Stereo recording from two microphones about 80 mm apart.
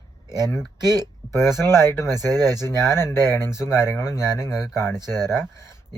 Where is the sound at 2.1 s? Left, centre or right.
Right.